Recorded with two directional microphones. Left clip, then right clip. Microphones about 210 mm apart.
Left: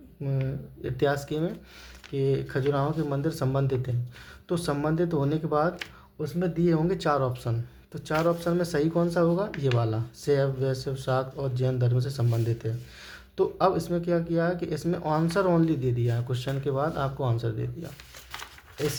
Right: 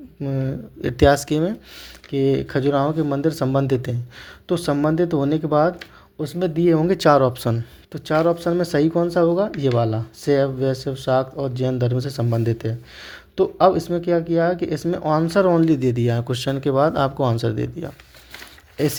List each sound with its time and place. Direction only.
0.2 s speech: 30° right (ahead or behind)